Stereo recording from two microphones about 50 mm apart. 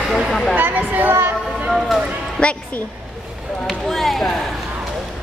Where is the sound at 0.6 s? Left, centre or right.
Right.